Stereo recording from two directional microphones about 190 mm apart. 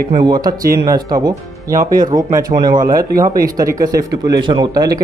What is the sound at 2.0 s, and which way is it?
A man's voice, 20° right (ahead or behind).